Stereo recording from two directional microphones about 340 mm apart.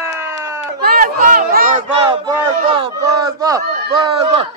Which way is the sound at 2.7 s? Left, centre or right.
Centre.